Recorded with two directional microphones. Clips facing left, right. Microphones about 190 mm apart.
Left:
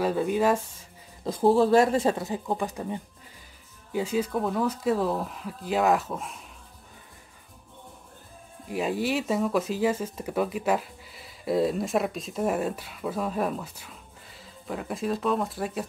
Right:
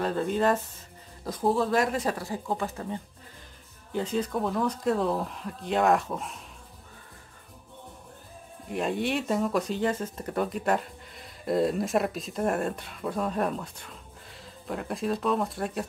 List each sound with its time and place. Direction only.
0.0 s speech: 5° left (ahead or behind)
1.2 s speech: 30° left (ahead or behind); by 6.4 s centre (ahead or behind)
8.6 s speech: centre (ahead or behind)